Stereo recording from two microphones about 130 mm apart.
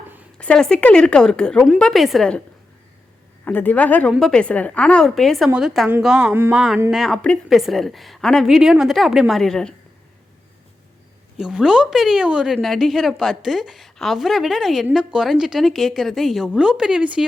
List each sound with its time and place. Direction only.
0.3 s a woman's voice: 5° left (ahead or behind)
3.4 s a woman's voice: 15° left (ahead or behind); by 6.3 s 5° right (ahead or behind)
6.3 s speech: 15° right (ahead or behind)
6.9 s a woman's voice: centre (ahead or behind)
11.3 s a woman's voice: 5° right (ahead or behind)